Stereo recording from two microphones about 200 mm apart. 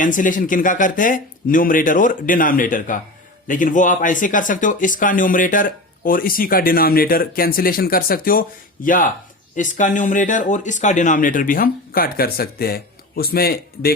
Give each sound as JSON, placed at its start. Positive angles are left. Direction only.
{"t": 0.0, "sound": "speech", "side_deg": 40}